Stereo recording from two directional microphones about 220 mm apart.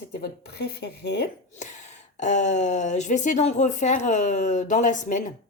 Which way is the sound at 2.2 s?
30° left (ahead or behind).